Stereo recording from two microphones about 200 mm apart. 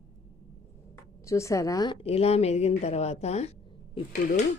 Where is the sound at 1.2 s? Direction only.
15° left (ahead or behind).